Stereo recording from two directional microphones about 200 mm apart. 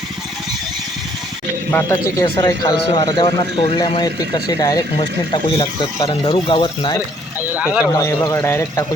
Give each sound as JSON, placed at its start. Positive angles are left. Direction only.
{"t": 1.7, "sound": "a man's voice", "side_deg": 15}
{"t": 7.6, "sound": "speech", "side_deg": 0}
{"t": 7.9, "sound": "a man's voice", "side_deg": 15}